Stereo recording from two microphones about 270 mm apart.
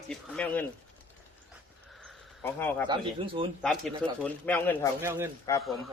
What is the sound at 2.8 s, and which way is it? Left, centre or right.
Speech, centre.